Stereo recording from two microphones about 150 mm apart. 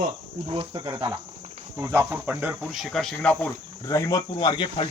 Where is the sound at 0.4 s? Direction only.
40° right (ahead or behind).